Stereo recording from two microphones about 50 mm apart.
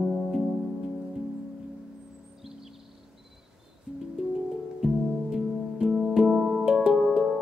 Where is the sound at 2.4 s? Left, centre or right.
Centre.